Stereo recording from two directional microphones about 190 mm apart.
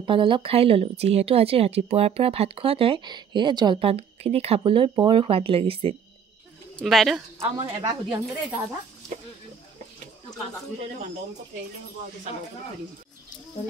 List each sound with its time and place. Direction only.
0.0 s a woman's voice: 25° right (ahead or behind)
6.8 s speech: centre (ahead or behind)
7.5 s a woman's voice: 25° right (ahead or behind)